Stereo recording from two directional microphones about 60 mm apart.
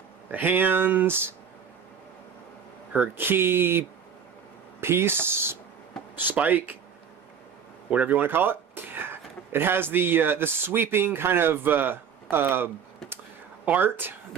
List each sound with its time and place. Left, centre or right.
0.3 s speech: right
2.9 s speech: right
6.1 s speech: right
7.9 s speech: right